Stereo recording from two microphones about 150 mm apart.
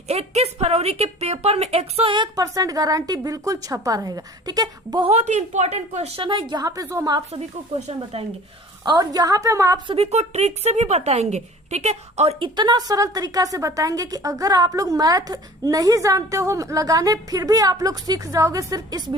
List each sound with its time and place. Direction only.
0.1 s a woman's voice: 45° right (ahead or behind); by 5.0 s 25° right (ahead or behind)
5.0 s a woman's voice: 45° right (ahead or behind); by 7.2 s 25° right (ahead or behind)
7.3 s speech: 45° right (ahead or behind)
8.8 s a woman's voice: 25° right (ahead or behind)
9.8 s speech: 40° right (ahead or behind)
12.5 s a woman's voice: 25° right (ahead or behind)